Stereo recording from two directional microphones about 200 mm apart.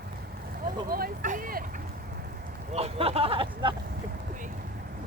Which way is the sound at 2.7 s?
30° right (ahead or behind).